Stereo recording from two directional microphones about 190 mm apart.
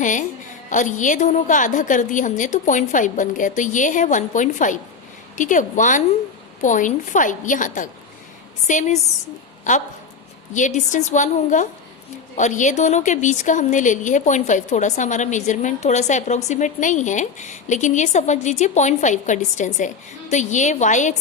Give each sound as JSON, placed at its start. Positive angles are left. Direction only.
{"t": 0.0, "sound": "a woman's voice", "side_deg": 40}
{"t": 10.5, "sound": "a woman's voice", "side_deg": 40}